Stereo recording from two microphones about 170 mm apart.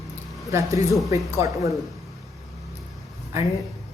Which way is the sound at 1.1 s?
20° right (ahead or behind).